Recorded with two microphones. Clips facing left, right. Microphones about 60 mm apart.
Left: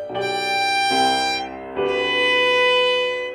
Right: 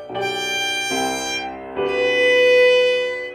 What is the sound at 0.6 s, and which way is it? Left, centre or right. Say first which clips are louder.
Music: left 5 dB; left.